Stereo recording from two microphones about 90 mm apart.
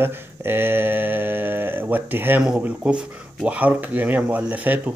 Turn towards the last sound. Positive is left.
turn(degrees=-20)  # may be behind; listen again after turning